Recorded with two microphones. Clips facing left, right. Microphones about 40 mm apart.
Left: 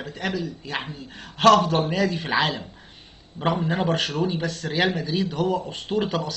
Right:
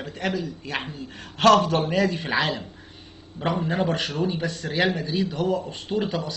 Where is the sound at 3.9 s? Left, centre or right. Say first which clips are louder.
Left 2 dB; left.